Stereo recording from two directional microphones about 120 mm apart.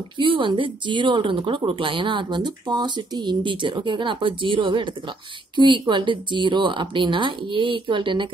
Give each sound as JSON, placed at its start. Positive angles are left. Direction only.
{"t": 0.2, "sound": "a woman's voice", "side_deg": -45}